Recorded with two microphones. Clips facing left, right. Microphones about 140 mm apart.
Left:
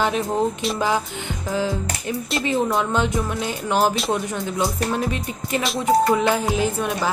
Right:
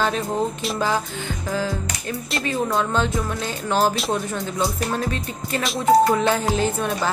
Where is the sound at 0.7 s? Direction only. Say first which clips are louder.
Left 1 dB; 15° left (ahead or behind).